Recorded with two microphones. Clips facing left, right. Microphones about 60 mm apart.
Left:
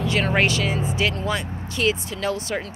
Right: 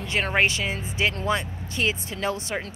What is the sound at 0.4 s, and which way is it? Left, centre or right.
Speech, right.